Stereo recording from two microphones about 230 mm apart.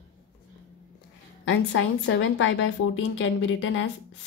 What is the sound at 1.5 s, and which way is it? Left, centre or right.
A woman's voice, left.